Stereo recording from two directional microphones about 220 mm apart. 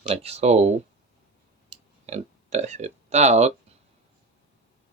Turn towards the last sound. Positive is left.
turn(degrees=-30)  # may be behind; listen again after turning